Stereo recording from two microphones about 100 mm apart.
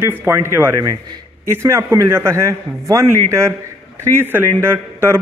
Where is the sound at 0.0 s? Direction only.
20° right (ahead or behind).